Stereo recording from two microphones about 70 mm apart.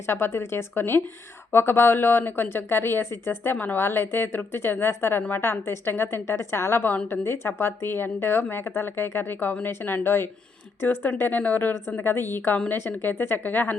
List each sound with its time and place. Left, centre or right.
0.1 s a woman's voice: left